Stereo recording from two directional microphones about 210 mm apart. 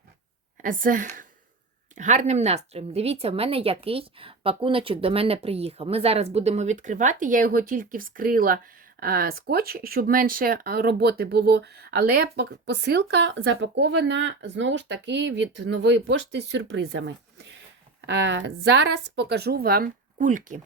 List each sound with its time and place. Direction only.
0.6 s a woman's voice: 40° right (ahead or behind)